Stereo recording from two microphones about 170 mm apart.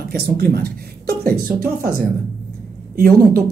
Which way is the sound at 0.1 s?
65° right (ahead or behind).